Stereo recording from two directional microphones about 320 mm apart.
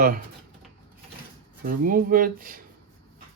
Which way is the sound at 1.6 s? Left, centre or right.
Right.